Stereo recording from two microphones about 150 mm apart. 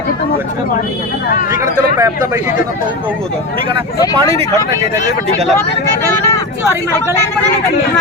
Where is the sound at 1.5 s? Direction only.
20° right (ahead or behind).